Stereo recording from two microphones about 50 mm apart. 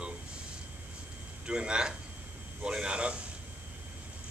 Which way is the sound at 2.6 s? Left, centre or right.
Centre.